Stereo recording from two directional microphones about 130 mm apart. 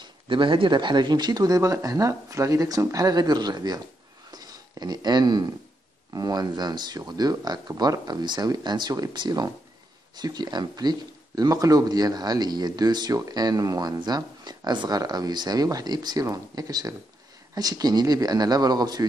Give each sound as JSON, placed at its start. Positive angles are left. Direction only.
{"t": 0.0, "sound": "speech", "side_deg": -40}
{"t": 4.3, "sound": "a sound", "side_deg": -30}
{"t": 6.1, "sound": "speech", "side_deg": -30}